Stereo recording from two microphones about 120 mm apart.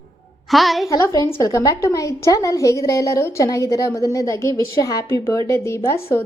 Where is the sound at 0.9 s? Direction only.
25° left (ahead or behind).